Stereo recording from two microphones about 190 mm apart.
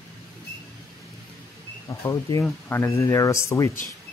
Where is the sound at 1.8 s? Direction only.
15° left (ahead or behind).